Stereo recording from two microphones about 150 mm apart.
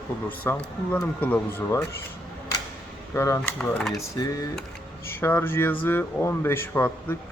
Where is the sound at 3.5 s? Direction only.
5° left (ahead or behind).